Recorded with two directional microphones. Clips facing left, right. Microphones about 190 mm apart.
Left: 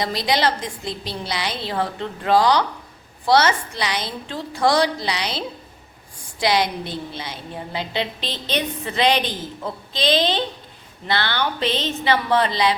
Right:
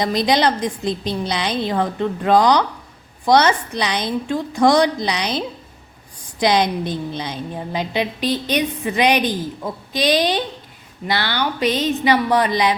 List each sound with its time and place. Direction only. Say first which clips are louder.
0.0 s a woman's voice: right 4 dB; 20° right (ahead or behind)
6.4 s a woman's voice: right 3 dB; 20° right (ahead or behind)